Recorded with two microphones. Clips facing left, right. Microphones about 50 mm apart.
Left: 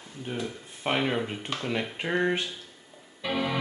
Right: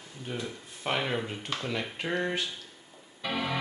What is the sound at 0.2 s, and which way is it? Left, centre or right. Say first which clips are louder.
Speech: left 3 dB; centre.